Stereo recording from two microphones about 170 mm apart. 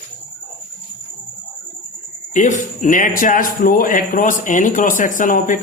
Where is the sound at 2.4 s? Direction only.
50° left (ahead or behind).